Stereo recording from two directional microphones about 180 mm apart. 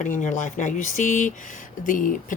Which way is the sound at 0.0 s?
45° left (ahead or behind).